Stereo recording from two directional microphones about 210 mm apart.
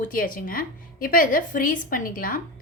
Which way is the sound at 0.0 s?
40° left (ahead or behind).